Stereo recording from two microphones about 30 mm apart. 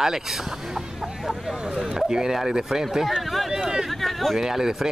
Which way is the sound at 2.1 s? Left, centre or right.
Right.